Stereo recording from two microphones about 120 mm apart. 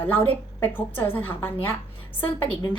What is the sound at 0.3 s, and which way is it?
A woman's voice, 15° left (ahead or behind).